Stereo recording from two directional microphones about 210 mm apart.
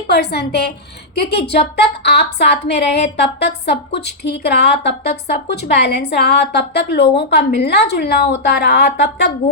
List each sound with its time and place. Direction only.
0.1 s a woman's voice: 50° left (ahead or behind)